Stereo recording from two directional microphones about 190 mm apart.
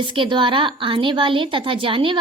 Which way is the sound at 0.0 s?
25° right (ahead or behind).